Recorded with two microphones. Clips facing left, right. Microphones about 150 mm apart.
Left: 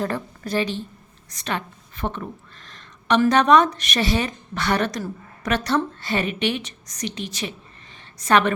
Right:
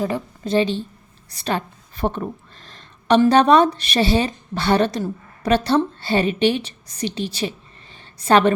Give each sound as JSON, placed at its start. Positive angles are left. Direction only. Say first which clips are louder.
{"t": 0.4, "sound": "a woman's voice", "louder": "right 6 dB", "side_deg": -25}